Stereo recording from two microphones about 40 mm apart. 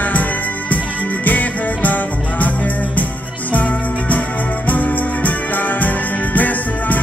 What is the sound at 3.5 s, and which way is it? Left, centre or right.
Music, left.